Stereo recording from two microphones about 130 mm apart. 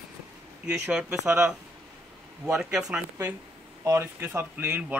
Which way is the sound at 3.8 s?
20° right (ahead or behind).